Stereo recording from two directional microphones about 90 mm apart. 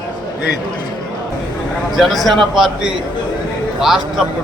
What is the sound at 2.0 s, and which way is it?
Speech, centre (ahead or behind).